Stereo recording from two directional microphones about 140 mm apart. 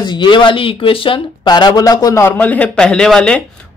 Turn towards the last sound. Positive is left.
turn(degrees=5)  # may be behind; listen again after turning